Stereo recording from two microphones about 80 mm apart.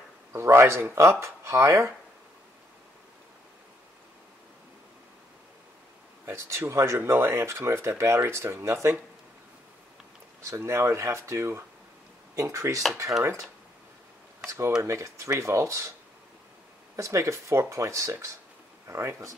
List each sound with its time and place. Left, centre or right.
0.3 s speech: right
6.2 s speech: right
10.4 s speech: right
14.8 s speech: right
16.9 s speech: right